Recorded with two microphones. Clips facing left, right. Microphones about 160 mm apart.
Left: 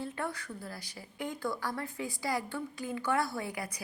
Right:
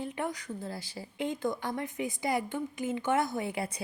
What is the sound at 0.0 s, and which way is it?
Speech, 15° right (ahead or behind).